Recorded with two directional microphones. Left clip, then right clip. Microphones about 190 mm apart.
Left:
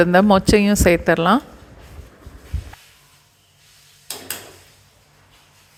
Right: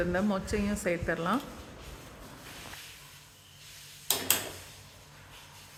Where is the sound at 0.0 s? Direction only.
50° left (ahead or behind).